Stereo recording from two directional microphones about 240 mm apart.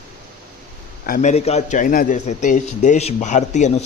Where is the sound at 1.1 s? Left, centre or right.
Left.